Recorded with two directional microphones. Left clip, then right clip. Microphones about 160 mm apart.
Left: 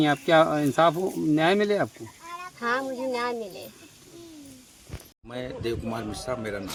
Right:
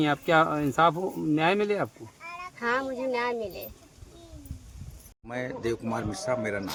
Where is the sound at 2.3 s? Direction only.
15° right (ahead or behind).